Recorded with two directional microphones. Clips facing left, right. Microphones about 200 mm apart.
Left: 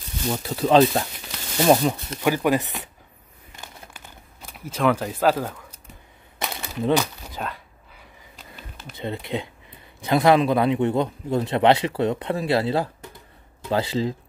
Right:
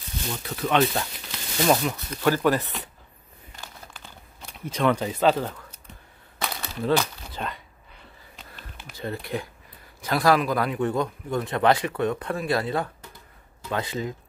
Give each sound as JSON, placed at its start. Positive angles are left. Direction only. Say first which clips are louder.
{"t": 0.4, "sound": "speech", "louder": "left 6 dB", "side_deg": 30}
{"t": 2.2, "sound": "speech", "louder": "left 1 dB", "side_deg": 15}
{"t": 4.5, "sound": "speech", "louder": "left 2 dB", "side_deg": 5}
{"t": 6.4, "sound": "a sound", "louder": "left 2 dB", "side_deg": 20}
{"t": 7.0, "sound": "a sound", "louder": "left 2 dB", "side_deg": 5}
{"t": 8.9, "sound": "a man's voice", "louder": "left 2 dB", "side_deg": 20}